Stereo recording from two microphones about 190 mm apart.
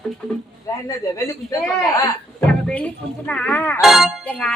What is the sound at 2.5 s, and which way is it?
Speech, 5° left (ahead or behind).